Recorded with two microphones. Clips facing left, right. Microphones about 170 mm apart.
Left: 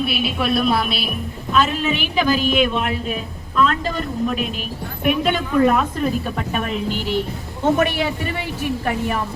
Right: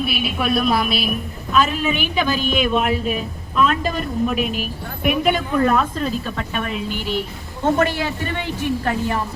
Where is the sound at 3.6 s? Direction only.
15° right (ahead or behind).